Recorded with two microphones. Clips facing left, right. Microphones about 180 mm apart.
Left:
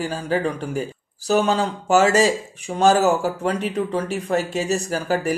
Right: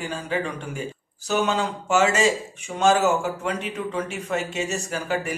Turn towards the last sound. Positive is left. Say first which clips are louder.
# left 5 dB
turn(degrees=35)  # may be behind; listen again after turning